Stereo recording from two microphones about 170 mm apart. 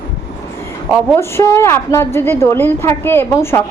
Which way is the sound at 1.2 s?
15° left (ahead or behind).